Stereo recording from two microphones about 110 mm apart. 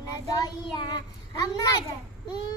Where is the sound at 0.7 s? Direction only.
40° left (ahead or behind).